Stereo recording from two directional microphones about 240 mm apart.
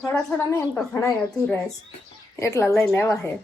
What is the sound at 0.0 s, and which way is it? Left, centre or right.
Speech, centre.